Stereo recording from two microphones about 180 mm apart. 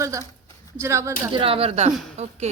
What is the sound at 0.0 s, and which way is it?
A woman's voice, 15° right (ahead or behind).